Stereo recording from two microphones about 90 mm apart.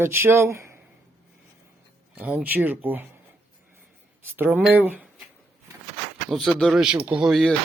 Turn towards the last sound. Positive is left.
turn(degrees=10)  # may be behind; listen again after turning